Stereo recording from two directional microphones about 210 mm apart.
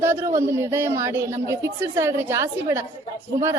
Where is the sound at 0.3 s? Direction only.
15° right (ahead or behind).